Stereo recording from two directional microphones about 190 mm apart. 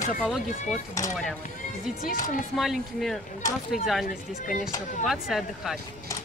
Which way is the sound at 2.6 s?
Centre (ahead or behind).